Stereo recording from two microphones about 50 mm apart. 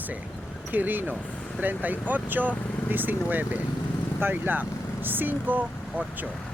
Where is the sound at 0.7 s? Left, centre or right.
Right.